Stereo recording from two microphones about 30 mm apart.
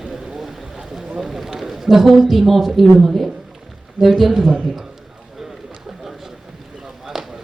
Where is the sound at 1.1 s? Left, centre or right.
Centre.